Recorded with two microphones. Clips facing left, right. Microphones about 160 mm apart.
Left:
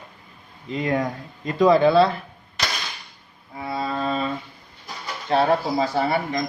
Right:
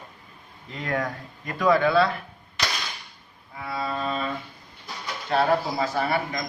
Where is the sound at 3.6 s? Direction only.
25° left (ahead or behind).